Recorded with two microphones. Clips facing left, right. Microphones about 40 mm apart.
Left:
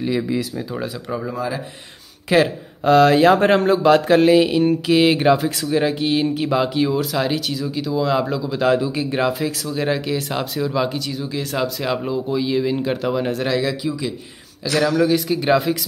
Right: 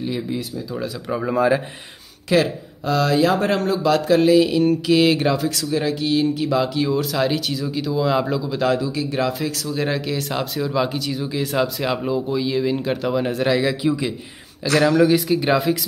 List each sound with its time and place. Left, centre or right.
1.3 s speech: right
2.2 s speech: centre
2.8 s speech: left
6.9 s speech: centre
8.7 s speech: left
9.4 s speech: centre
14.8 s speech: centre